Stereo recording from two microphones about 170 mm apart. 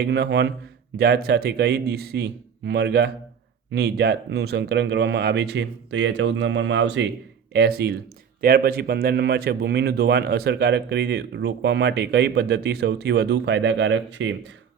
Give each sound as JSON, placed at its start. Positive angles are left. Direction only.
{"t": 0.0, "sound": "speech", "side_deg": -85}
{"t": 0.9, "sound": "speech", "side_deg": -70}
{"t": 7.5, "sound": "speech", "side_deg": -75}
{"t": 8.4, "sound": "speech", "side_deg": -60}